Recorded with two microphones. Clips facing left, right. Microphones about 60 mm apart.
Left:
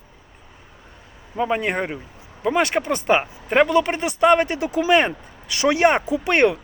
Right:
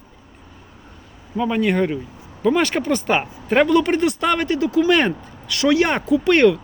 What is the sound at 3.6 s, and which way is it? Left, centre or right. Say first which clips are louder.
Speech: right 3 dB; centre.